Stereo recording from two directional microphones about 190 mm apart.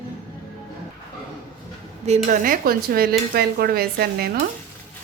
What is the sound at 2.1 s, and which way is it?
Speech, 40° right (ahead or behind).